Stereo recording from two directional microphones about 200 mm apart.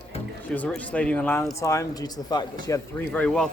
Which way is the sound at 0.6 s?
5° left (ahead or behind).